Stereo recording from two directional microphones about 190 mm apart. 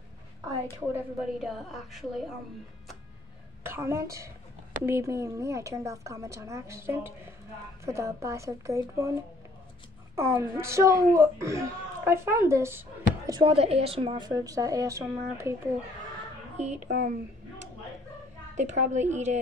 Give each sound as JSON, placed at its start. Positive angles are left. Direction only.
{"t": 0.9, "sound": "a woman's voice", "side_deg": 0}
{"t": 3.6, "sound": "a woman's voice", "side_deg": -15}
{"t": 13.3, "sound": "a woman's voice", "side_deg": -30}
{"t": 16.5, "sound": "a woman's voice", "side_deg": -35}
{"t": 18.5, "sound": "a woman's voice", "side_deg": -40}